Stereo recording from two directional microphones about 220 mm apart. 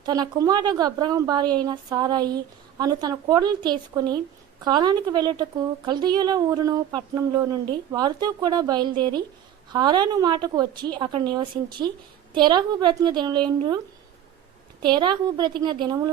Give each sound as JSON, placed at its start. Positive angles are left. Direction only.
{"t": 0.0, "sound": "a woman's voice", "side_deg": -15}
{"t": 14.8, "sound": "a woman's voice", "side_deg": -20}